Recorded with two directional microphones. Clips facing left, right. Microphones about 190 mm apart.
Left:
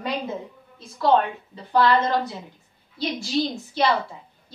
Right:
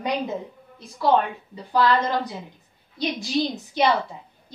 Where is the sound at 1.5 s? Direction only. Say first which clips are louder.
Left 1 dB; 10° right (ahead or behind).